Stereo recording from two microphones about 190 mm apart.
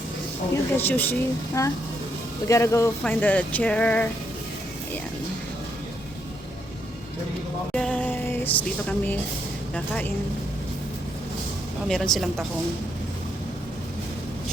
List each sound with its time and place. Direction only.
0.5 s speech: 10° left (ahead or behind)
7.7 s speech: 5° left (ahead or behind)
11.9 s speech: centre (ahead or behind)